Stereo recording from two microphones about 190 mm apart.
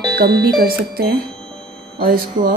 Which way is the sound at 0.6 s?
55° right (ahead or behind).